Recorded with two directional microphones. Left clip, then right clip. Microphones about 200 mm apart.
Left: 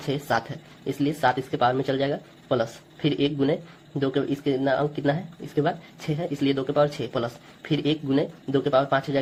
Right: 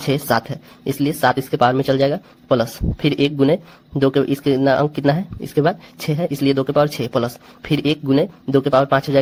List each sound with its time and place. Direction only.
0.1 s speech: 45° right (ahead or behind)